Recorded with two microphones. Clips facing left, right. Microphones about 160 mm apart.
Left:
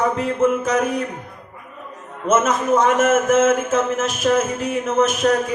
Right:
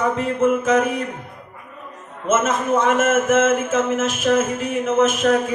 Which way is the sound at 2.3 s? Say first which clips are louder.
Left 2 dB; 40° left (ahead or behind).